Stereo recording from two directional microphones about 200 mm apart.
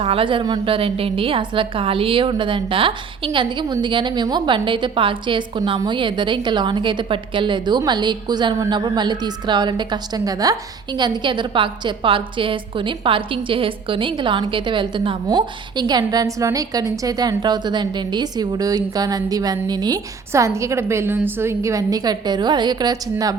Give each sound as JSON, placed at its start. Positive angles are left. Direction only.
{"t": 0.0, "sound": "a woman's voice", "side_deg": -25}